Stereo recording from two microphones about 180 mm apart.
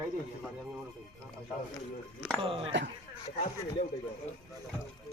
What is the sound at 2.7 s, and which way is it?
Speech, 85° right.